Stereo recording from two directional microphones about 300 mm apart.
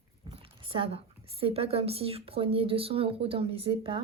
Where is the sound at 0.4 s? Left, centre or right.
Centre.